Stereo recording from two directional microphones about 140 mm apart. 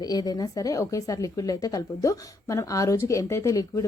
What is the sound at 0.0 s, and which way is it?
Speech, 30° left (ahead or behind).